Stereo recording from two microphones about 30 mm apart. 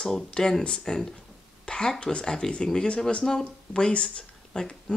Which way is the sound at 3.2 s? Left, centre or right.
Left.